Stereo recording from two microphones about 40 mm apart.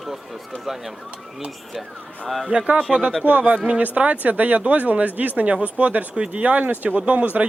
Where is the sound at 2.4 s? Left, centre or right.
Right.